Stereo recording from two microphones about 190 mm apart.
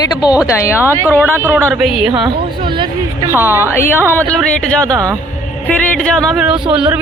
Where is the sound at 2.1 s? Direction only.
25° right (ahead or behind).